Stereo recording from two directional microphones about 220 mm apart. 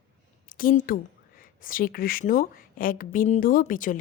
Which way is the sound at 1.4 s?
40° left (ahead or behind).